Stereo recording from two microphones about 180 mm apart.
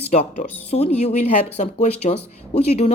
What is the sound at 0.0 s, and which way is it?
Speech, 40° left (ahead or behind).